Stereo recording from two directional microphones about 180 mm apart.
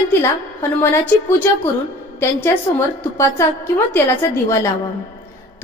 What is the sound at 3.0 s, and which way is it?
A woman's voice, 15° left (ahead or behind).